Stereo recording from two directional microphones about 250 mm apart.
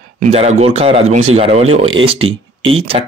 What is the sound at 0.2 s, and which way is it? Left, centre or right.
Speech, right.